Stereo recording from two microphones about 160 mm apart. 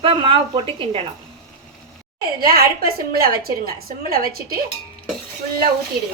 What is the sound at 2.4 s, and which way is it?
A woman's voice, 70° right (ahead or behind).